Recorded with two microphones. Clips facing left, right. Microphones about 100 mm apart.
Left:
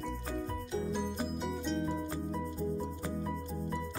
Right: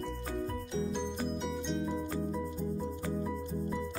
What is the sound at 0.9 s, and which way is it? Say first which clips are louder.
Music: even; 5° left (ahead or behind).